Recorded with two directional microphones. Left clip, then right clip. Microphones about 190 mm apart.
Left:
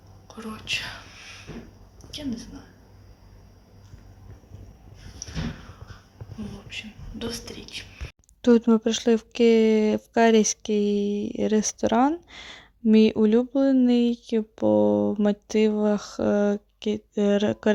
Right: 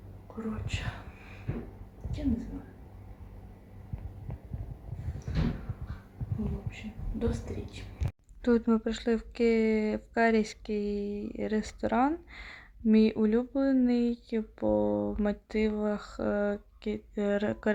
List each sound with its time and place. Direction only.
8.4 s speech: 60° left (ahead or behind)